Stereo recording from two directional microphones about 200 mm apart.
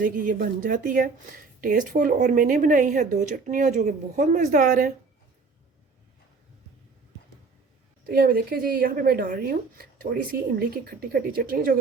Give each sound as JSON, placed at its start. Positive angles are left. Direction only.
{"t": 0.0, "sound": "speech", "side_deg": -45}
{"t": 8.0, "sound": "speech", "side_deg": -50}